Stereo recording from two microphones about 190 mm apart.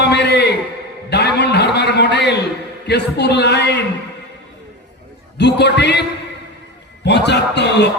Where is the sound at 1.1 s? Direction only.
60° left (ahead or behind).